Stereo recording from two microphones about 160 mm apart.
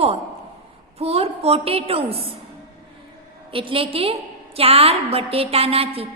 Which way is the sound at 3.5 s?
35° right (ahead or behind).